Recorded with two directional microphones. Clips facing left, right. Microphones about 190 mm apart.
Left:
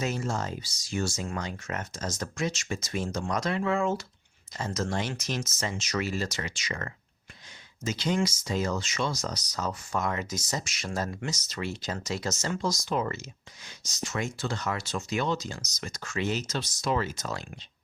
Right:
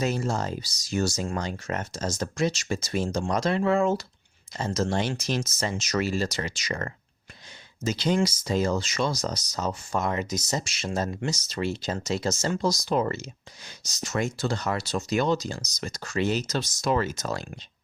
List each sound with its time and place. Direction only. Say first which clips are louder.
0.0 s speech: right 4 dB; 35° right (ahead or behind)
4.5 s speech: right 4 dB; 30° right (ahead or behind)